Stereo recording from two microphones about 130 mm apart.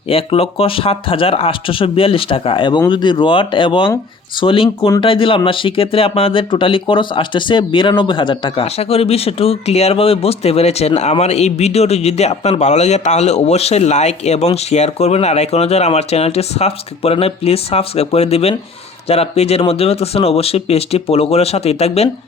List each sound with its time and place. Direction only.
0.1 s speech: 45° left (ahead or behind)